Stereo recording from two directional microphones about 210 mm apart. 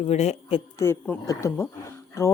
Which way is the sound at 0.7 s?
10° left (ahead or behind).